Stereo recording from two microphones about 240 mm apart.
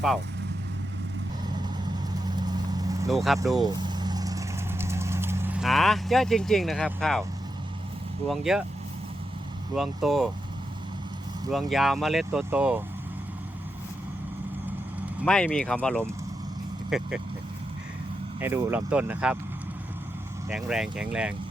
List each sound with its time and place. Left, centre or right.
2.2 s vehicle: centre
3.1 s speech: centre
3.4 s vehicle: centre
8.3 s speech: centre
9.7 s speech: centre
11.5 s speech: centre
15.2 s speech: centre
18.3 s speech: centre
20.5 s speech: centre